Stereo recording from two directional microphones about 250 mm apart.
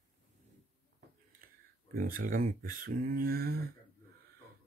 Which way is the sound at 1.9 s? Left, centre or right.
Right.